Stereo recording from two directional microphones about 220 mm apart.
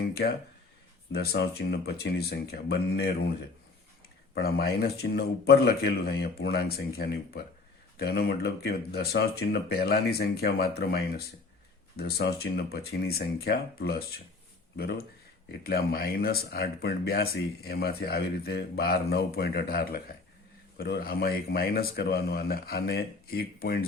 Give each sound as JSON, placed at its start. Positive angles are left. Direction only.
{"t": 1.1, "sound": "speech", "side_deg": 45}
{"t": 4.4, "sound": "speech", "side_deg": 45}